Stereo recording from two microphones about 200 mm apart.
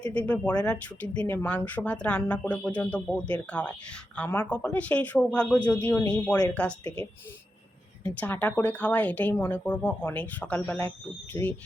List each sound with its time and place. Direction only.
0.0 s speech: 5° left (ahead or behind)